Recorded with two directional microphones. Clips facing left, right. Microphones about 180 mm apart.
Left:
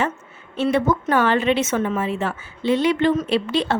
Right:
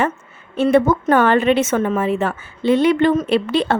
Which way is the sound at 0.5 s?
50° right (ahead or behind).